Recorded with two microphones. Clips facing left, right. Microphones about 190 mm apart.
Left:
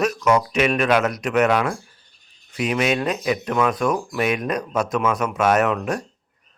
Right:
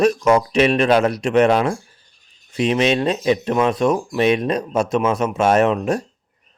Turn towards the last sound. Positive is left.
turn(degrees=-25)  # may be behind; listen again after turning